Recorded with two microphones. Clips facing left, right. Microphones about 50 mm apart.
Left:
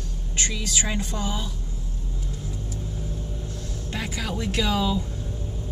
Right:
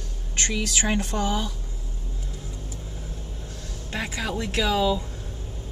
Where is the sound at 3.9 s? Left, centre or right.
Right.